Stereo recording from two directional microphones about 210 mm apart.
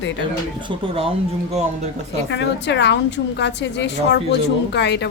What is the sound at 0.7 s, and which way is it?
Speech, 25° right (ahead or behind).